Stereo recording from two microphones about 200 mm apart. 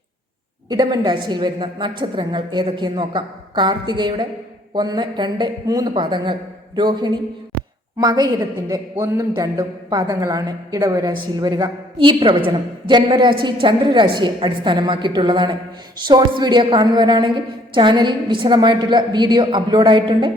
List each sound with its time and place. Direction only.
0.7 s a man's voice: 20° right (ahead or behind)